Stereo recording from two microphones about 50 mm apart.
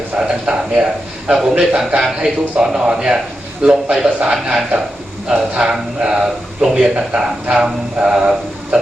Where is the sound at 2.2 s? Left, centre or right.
Centre.